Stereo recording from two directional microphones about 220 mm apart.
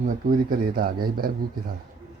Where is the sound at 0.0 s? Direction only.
40° right (ahead or behind).